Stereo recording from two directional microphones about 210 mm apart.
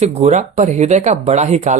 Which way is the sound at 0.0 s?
30° right (ahead or behind).